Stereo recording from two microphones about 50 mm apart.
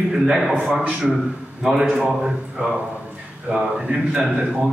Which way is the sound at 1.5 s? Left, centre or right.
Centre.